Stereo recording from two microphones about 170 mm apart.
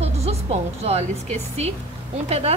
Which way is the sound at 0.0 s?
40° right (ahead or behind).